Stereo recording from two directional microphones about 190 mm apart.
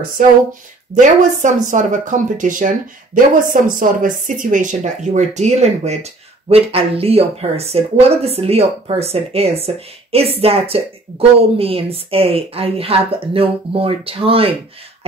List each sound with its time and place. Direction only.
0.9 s a woman's voice: 40° right (ahead or behind)